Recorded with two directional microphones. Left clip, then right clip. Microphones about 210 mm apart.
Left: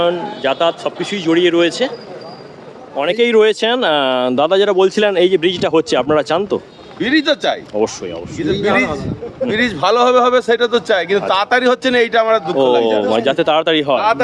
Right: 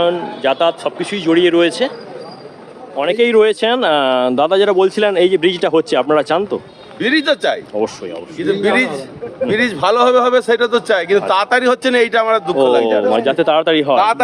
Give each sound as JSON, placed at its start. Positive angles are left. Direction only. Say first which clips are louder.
{"t": 0.0, "sound": "speech", "louder": "right 1 dB", "side_deg": -5}
{"t": 3.0, "sound": "speech", "louder": "even", "side_deg": 10}
{"t": 7.0, "sound": "speech", "louder": "even", "side_deg": -15}
{"t": 7.7, "sound": "speech", "louder": "left 1 dB", "side_deg": 10}
{"t": 8.6, "sound": "a man's voice", "louder": "even", "side_deg": -25}
{"t": 9.5, "sound": "speech", "louder": "even", "side_deg": -5}
{"t": 13.1, "sound": "speech", "louder": "right 1 dB", "side_deg": 10}
{"t": 13.9, "sound": "speech", "louder": "right 2 dB", "side_deg": -50}